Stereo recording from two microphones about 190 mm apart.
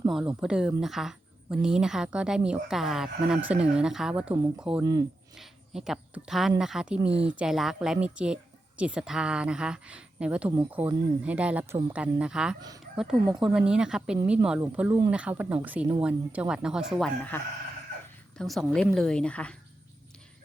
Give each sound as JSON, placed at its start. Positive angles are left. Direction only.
{"t": 0.1, "sound": "a woman's voice", "side_deg": -5}
{"t": 4.8, "sound": "speech", "side_deg": -20}
{"t": 5.4, "sound": "a woman's voice", "side_deg": 0}